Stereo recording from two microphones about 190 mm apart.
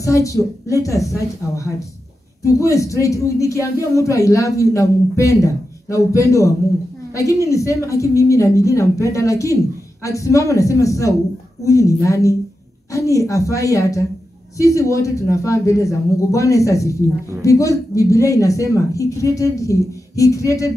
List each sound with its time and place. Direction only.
0.0 s speech: 15° left (ahead or behind)